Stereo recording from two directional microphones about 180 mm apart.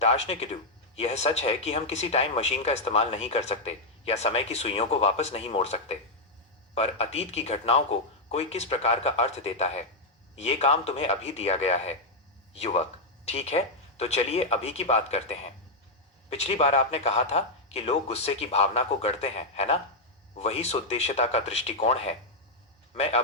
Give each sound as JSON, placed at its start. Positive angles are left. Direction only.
{"t": 0.0, "sound": "speech", "side_deg": 35}